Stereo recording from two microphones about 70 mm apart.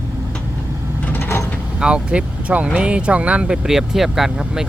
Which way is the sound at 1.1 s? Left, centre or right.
Left.